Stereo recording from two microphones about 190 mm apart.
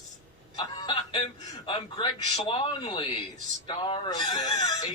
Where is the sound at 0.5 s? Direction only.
25° left (ahead or behind).